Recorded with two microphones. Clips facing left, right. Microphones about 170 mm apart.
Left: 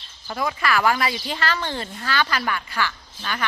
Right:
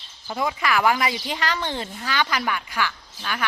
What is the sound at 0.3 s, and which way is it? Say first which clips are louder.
A woman's voice: even; 15° right (ahead or behind).